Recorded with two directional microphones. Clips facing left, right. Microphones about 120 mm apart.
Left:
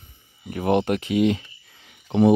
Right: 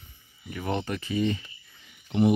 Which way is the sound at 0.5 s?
60° left (ahead or behind).